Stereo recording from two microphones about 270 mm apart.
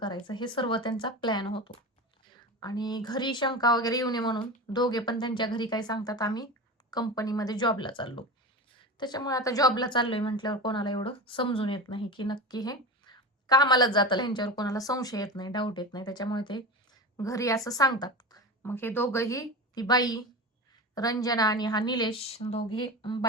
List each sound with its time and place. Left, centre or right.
0.0 s a woman's voice: centre